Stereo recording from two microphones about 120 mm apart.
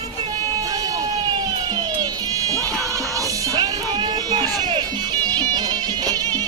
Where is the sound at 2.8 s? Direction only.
25° right (ahead or behind).